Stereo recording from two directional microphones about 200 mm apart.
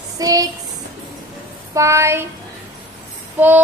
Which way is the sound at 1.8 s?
15° right (ahead or behind).